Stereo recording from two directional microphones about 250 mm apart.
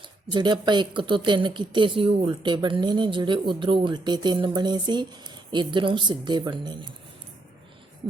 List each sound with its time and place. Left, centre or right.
0.3 s a woman's voice: centre